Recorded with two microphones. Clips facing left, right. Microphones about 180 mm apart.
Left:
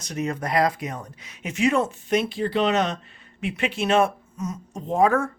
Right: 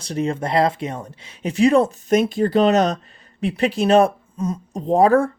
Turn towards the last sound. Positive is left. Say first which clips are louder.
# right 5 dB
turn(degrees=-35)  # may be behind; listen again after turning